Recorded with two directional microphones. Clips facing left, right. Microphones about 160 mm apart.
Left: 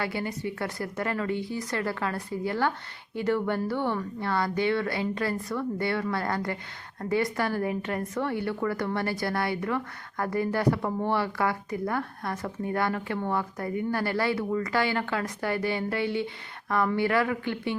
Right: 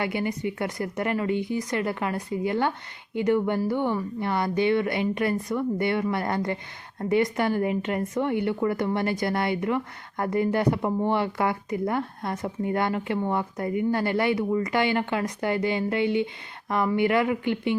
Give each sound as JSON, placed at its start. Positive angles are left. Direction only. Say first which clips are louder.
{"t": 0.0, "sound": "a woman's voice", "louder": "right 4 dB", "side_deg": -20}